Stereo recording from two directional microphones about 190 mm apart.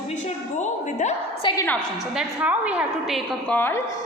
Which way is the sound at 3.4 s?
10° left (ahead or behind).